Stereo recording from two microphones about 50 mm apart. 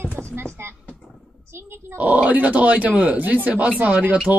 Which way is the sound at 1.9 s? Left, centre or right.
Right.